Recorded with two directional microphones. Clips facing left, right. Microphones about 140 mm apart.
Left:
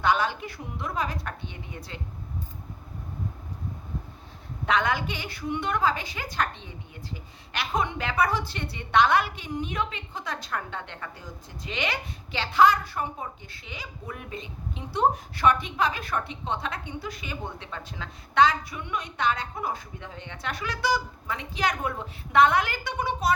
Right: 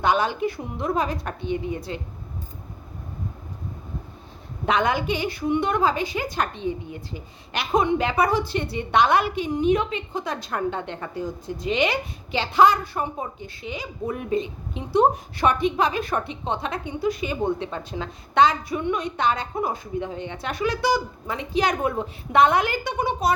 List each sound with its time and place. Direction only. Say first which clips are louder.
0.0 s a woman's voice: right 4 dB; 15° right (ahead or behind)
4.6 s a woman's voice: right 3 dB; 15° right (ahead or behind)